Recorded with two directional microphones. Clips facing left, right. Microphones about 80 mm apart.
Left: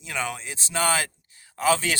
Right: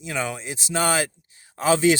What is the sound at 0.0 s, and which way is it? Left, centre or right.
Speech, centre.